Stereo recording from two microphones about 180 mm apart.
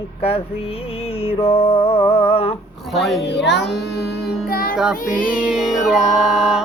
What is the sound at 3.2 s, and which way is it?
Music, 75° left (ahead or behind).